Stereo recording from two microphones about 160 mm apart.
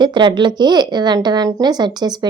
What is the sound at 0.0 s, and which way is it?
A woman's voice, 30° right (ahead or behind).